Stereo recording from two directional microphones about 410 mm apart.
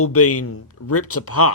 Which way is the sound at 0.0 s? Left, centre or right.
Left.